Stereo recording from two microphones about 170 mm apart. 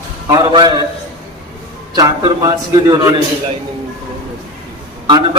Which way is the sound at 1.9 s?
25° right (ahead or behind).